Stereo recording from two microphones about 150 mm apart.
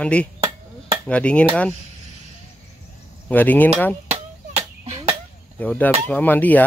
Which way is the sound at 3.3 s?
10° left (ahead or behind).